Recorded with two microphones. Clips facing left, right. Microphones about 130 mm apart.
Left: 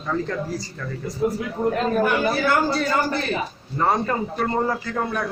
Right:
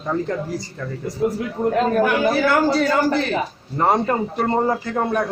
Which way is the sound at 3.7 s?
20° right (ahead or behind).